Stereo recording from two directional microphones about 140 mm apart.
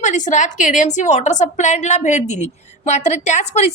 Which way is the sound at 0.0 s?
60° left (ahead or behind).